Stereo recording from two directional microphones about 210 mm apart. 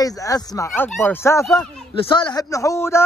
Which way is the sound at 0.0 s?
15° left (ahead or behind).